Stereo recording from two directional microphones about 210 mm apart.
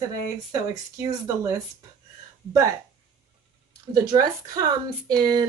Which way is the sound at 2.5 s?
15° right (ahead or behind).